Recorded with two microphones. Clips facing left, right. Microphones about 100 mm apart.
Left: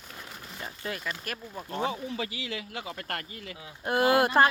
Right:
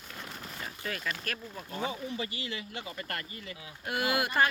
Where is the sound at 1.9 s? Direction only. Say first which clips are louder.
Left 3 dB; 90° left.